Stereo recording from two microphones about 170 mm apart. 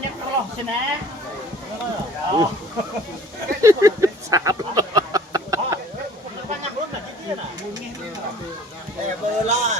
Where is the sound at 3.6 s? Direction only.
20° right (ahead or behind).